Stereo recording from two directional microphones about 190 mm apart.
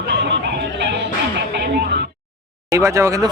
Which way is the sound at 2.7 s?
15° right (ahead or behind).